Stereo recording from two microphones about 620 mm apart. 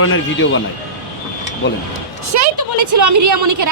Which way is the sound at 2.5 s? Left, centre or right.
Right.